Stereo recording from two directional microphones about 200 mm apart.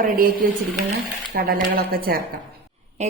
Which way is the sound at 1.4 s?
50° right (ahead or behind).